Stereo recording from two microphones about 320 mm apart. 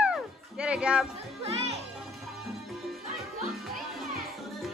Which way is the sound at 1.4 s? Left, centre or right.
Centre.